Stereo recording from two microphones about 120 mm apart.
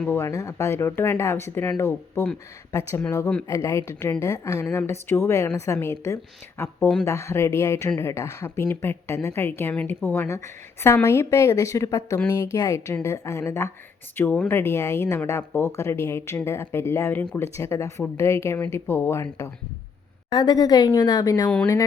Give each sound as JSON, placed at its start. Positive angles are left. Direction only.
{"t": 0.1, "sound": "a woman's voice", "side_deg": 25}
{"t": 6.7, "sound": "speech", "side_deg": 10}
{"t": 7.0, "sound": "a woman's voice", "side_deg": 20}
{"t": 20.3, "sound": "a woman's voice", "side_deg": 35}